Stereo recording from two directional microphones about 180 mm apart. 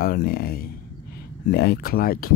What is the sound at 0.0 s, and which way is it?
Speech, 55° left (ahead or behind).